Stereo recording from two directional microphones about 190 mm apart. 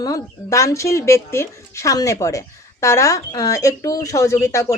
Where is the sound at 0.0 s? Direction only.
15° left (ahead or behind).